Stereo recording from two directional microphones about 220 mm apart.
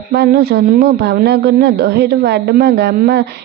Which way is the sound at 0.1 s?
45° right (ahead or behind).